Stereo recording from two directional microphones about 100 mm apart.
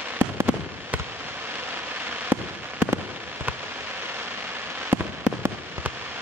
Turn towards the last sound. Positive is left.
turn(degrees=-20)  # may be behind; listen again after turning